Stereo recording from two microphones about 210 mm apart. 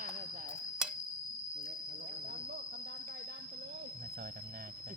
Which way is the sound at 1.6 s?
50° right (ahead or behind).